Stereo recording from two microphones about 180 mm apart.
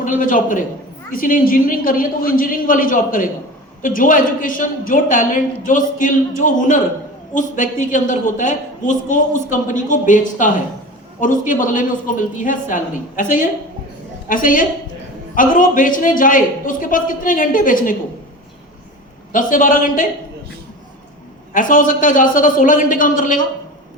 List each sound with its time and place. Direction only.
0.0 s a woman's voice: 45° left (ahead or behind)
19.3 s a woman's voice: 45° left (ahead or behind)
21.5 s a woman's voice: 45° left (ahead or behind)